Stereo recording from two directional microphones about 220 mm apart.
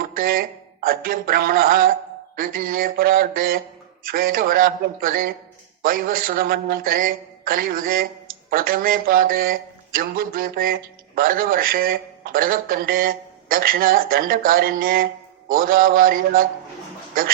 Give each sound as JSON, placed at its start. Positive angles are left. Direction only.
{"t": 0.2, "sound": "speech", "side_deg": -40}